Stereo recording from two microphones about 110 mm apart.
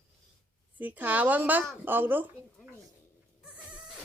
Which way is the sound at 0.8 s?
15° right (ahead or behind).